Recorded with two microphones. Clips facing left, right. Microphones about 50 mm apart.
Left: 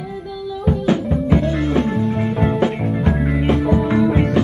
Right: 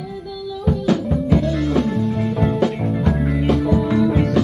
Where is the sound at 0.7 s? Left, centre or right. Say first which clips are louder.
Left 1 dB; left.